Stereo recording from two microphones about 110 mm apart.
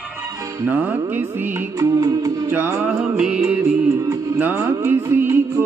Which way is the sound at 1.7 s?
30° right (ahead or behind).